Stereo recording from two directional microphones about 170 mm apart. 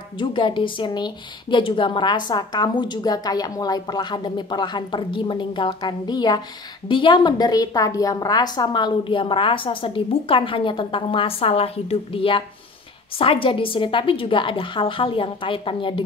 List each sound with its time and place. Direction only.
0.2 s a woman's voice: 30° left (ahead or behind)